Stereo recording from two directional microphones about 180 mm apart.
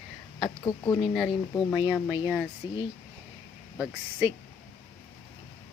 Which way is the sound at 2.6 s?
20° left (ahead or behind).